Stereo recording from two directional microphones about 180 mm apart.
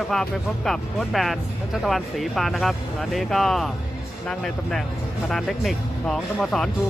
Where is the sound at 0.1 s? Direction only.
Centre (ahead or behind).